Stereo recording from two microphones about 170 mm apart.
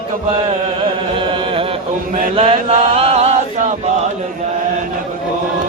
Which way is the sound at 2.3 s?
35° right (ahead or behind).